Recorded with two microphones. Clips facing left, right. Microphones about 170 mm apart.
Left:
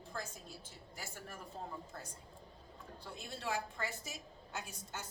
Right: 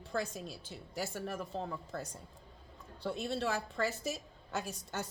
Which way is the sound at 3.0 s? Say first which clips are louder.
Right 11 dB; 70° right (ahead or behind).